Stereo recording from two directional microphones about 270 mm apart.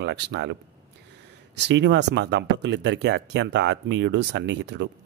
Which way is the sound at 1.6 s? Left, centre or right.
Right.